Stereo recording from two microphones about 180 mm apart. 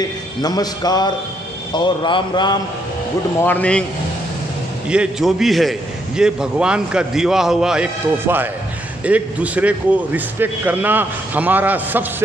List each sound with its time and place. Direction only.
0.4 s a man's voice: 20° left (ahead or behind)
3.4 s speech: 5° left (ahead or behind)
4.8 s a man's voice: 5° right (ahead or behind)